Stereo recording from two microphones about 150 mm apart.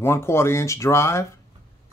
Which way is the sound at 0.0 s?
15° left (ahead or behind).